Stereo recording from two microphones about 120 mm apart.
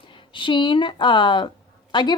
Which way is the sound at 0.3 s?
40° left (ahead or behind).